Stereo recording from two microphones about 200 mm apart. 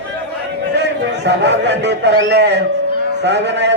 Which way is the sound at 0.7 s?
60° right (ahead or behind).